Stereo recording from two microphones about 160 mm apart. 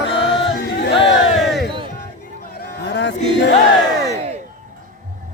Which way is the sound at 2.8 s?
90° left.